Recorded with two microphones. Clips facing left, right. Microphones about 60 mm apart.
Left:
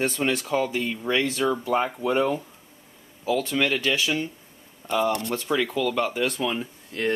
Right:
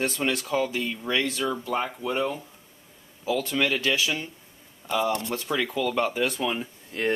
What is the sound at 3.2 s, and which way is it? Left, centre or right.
Speech, centre.